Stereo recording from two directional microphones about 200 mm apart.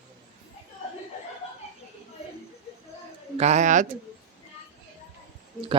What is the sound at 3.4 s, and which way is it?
Bird, 35° right (ahead or behind).